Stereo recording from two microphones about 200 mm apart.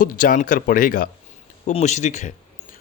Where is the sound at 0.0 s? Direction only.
45° left (ahead or behind).